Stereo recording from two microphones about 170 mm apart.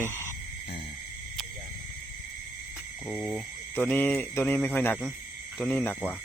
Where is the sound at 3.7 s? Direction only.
10° left (ahead or behind).